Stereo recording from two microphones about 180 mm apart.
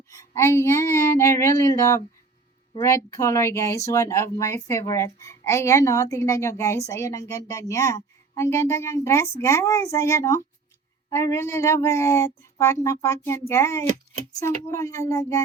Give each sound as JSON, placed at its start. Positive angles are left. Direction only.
{"t": 0.1, "sound": "speech", "side_deg": 15}